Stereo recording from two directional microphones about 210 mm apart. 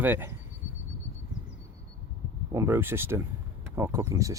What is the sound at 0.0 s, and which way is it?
Speech, 10° right (ahead or behind).